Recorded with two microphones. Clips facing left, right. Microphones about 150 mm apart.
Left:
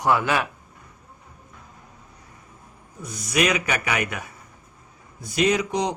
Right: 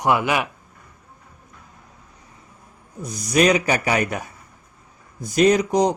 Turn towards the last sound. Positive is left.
turn(degrees=-40)  # may be behind; listen again after turning